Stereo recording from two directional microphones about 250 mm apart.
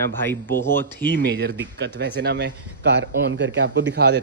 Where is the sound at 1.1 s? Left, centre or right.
Right.